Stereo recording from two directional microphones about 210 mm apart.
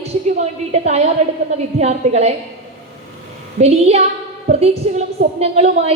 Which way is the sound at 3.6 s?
30° right (ahead or behind).